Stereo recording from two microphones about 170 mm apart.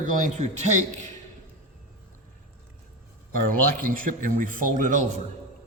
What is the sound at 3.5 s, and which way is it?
A man's voice, 55° right (ahead or behind).